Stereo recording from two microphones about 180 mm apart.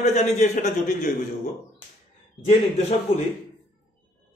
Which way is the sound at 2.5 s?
35° left (ahead or behind).